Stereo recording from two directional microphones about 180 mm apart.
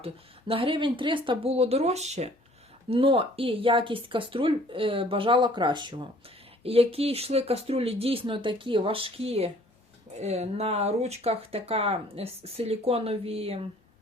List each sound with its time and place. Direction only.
0.0 s speech: 30° right (ahead or behind)